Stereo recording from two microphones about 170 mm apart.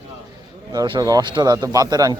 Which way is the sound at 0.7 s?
25° right (ahead or behind).